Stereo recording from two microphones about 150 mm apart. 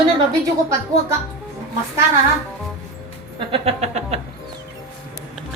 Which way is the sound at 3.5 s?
45° right (ahead or behind).